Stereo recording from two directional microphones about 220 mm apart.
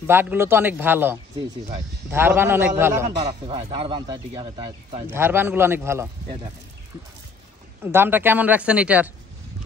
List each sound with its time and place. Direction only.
0.0 s speech: 10° right (ahead or behind)
3.4 s speech: 25° right (ahead or behind)
5.1 s speech: 10° right (ahead or behind)
7.8 s speech: 10° right (ahead or behind)